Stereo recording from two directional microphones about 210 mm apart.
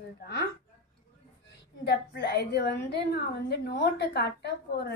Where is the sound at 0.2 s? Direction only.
50° left (ahead or behind).